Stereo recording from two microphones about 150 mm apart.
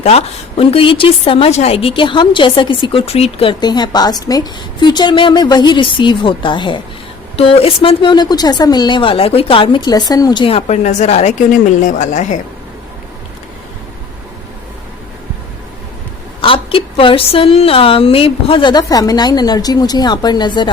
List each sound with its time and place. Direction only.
0.0 s a woman's voice: 45° left (ahead or behind)
3.6 s a woman's voice: 30° left (ahead or behind); by 12.4 s 55° left (ahead or behind)
16.4 s a woman's voice: 35° left (ahead or behind)